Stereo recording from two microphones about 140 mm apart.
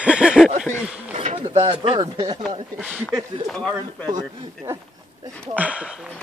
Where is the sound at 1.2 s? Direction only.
50° right (ahead or behind).